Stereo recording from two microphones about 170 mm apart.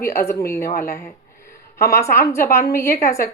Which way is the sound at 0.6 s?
60° left (ahead or behind).